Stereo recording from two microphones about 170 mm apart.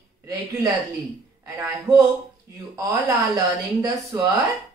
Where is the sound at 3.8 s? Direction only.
20° right (ahead or behind).